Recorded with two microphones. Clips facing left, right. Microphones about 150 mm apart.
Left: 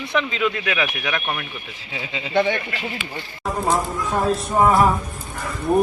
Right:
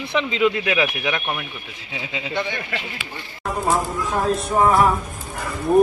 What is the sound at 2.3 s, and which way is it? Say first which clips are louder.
Speech: left 8 dB; 65° left (ahead or behind).